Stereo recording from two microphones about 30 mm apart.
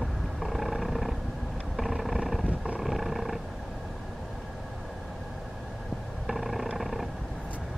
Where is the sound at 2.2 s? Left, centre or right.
Centre.